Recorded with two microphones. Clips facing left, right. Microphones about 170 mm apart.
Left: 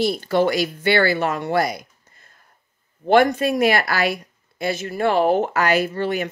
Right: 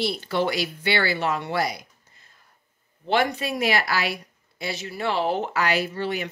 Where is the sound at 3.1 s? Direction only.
50° left (ahead or behind).